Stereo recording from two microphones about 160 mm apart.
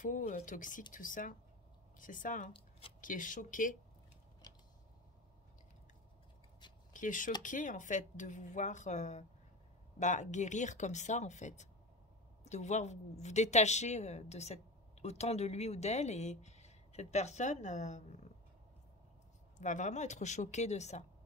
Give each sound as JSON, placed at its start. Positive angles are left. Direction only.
{"t": 0.0, "sound": "speech", "side_deg": 50}
{"t": 6.9, "sound": "speech", "side_deg": 55}
{"t": 19.6, "sound": "speech", "side_deg": 50}